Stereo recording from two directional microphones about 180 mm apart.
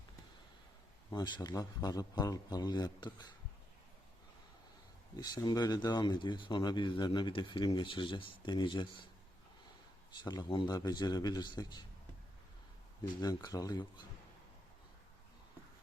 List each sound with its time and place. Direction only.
1.1 s speech: 25° left (ahead or behind)
5.1 s speech: 20° left (ahead or behind)
10.2 s speech: 25° left (ahead or behind)
13.2 s speech: 20° left (ahead or behind)